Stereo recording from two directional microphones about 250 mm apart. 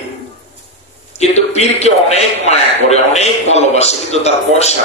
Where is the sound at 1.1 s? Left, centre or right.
Left.